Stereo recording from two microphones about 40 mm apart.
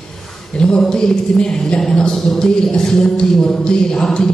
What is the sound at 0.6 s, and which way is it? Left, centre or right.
A man's voice, centre.